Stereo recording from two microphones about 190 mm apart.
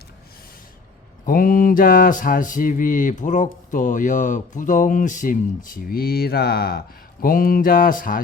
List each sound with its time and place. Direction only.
1.2 s mantra: 50° left (ahead or behind)